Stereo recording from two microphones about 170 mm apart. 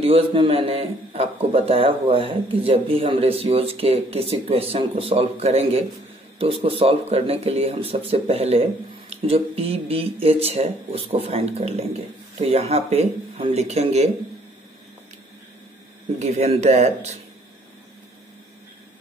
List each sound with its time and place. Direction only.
0.0 s a man's voice: 35° right (ahead or behind)
16.2 s a man's voice: 40° right (ahead or behind)